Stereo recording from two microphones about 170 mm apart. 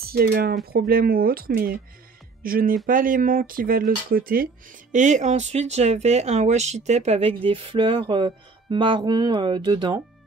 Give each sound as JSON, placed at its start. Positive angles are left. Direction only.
{"t": 0.0, "sound": "speech", "side_deg": -65}
{"t": 4.9, "sound": "speech", "side_deg": -45}